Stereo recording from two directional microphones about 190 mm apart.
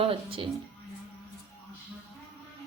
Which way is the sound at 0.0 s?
30° right (ahead or behind).